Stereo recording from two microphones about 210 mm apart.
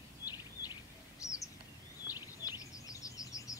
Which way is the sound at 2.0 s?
5° right (ahead or behind).